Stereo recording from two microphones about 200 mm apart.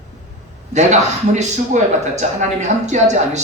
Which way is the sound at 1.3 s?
35° right (ahead or behind).